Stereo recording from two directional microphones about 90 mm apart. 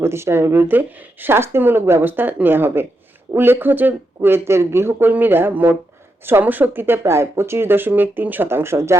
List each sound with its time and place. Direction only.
0.0 s speech: 30° right (ahead or behind)